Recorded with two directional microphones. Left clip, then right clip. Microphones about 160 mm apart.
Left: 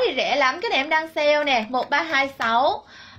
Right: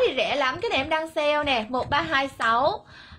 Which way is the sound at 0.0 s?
35° right (ahead or behind).